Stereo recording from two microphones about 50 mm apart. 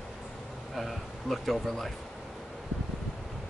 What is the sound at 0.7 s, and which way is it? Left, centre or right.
Speech, centre.